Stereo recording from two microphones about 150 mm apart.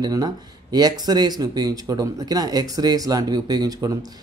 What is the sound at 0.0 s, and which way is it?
Speech, 25° right (ahead or behind).